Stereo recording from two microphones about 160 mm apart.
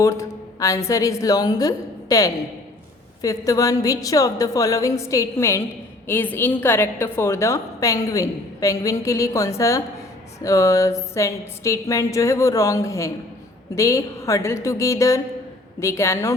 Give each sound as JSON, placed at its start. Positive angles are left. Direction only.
{"t": 0.0, "sound": "a woman's voice", "side_deg": 20}